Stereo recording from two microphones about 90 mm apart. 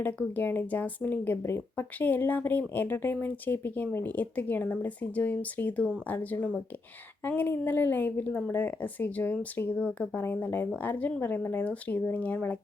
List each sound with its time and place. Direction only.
0.0 s speech: 20° left (ahead or behind)
7.3 s speech: 20° left (ahead or behind)
9.7 s speech: 5° left (ahead or behind)
10.2 s speech: 20° left (ahead or behind)